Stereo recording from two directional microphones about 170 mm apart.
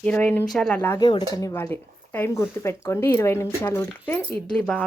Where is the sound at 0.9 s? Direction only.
25° left (ahead or behind).